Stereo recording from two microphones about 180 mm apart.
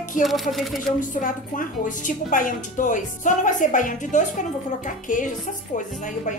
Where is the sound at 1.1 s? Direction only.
50° left (ahead or behind).